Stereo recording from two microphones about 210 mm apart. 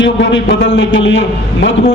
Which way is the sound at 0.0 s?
55° left (ahead or behind).